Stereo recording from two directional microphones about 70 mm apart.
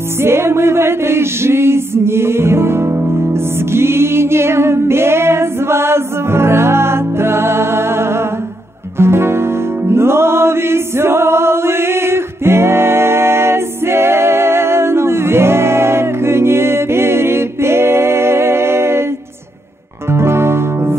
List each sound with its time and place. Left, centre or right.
0.2 s music: right
20.1 s music: right